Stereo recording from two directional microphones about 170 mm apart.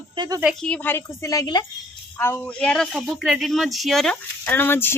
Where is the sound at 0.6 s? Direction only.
10° left (ahead or behind).